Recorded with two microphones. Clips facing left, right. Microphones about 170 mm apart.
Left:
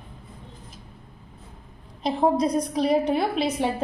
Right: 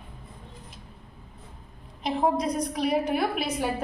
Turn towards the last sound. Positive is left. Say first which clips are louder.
# left 3 dB
turn(degrees=25)  # may be behind; listen again after turning